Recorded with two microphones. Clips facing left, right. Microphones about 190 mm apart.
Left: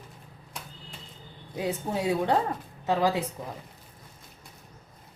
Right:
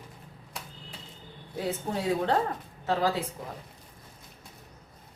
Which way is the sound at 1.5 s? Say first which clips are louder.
Left 2 dB; 15° left (ahead or behind).